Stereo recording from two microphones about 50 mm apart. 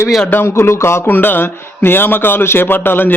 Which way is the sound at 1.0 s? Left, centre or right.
Left.